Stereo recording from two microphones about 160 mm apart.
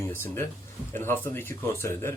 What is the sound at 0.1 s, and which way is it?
Speech, 15° left (ahead or behind).